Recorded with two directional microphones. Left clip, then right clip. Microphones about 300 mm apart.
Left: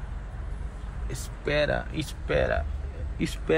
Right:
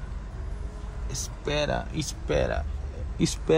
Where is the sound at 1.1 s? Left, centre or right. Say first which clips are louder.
Left 2 dB; centre.